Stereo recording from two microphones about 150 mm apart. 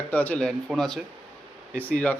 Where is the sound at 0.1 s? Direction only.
10° left (ahead or behind).